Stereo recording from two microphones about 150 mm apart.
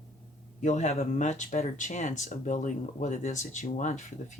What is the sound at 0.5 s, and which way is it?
Speech, 50° left (ahead or behind).